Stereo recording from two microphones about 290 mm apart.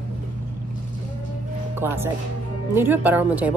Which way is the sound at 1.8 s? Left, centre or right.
Centre.